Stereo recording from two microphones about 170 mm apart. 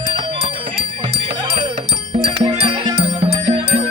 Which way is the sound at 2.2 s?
35° right (ahead or behind).